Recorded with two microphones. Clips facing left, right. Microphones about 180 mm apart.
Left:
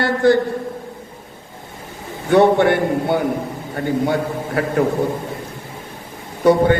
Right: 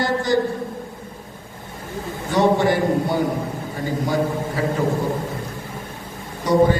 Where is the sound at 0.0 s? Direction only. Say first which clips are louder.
Left 6 dB; 60° left (ahead or behind).